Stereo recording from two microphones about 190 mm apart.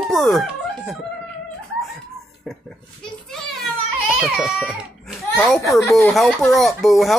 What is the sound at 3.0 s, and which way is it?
Children playing, centre (ahead or behind).